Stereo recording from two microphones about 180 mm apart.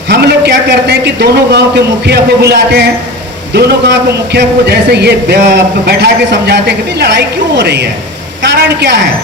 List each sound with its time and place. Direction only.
0.1 s a man's voice: 65° right (ahead or behind)